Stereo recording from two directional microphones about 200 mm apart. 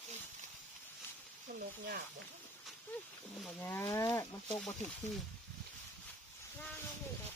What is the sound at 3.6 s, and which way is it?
Cattle, 10° left (ahead or behind).